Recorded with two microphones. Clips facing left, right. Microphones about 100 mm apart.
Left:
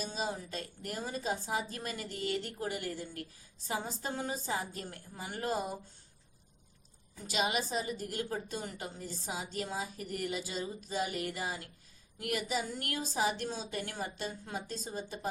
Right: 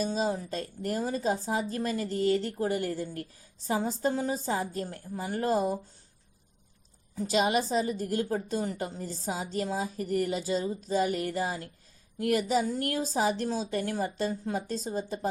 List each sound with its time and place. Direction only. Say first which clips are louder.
0.0 s a woman's voice: right 8 dB; 40° right (ahead or behind)
7.3 s a woman's voice: right 7 dB; 35° right (ahead or behind)